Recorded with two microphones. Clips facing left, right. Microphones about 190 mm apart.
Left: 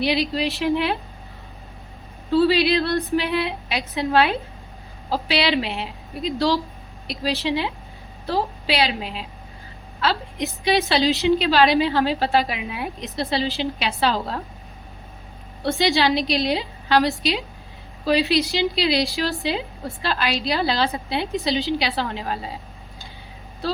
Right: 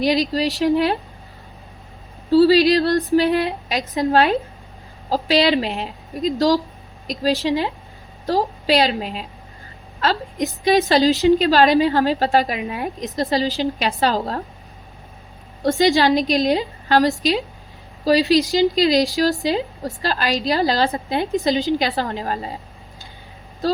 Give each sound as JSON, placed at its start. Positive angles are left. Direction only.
{"t": 0.0, "sound": "a woman's voice", "side_deg": -40}
{"t": 2.3, "sound": "a woman's voice", "side_deg": -35}
{"t": 15.6, "sound": "a woman's voice", "side_deg": -40}
{"t": 23.6, "sound": "a woman's voice", "side_deg": -40}